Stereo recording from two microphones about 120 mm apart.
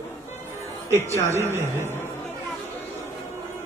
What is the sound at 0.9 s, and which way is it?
Speech, 20° right (ahead or behind).